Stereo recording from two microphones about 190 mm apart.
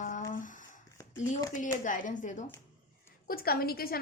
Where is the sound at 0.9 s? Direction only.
15° left (ahead or behind).